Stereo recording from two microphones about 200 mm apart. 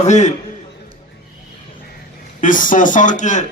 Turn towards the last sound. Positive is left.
turn(degrees=40)  # may be behind; listen again after turning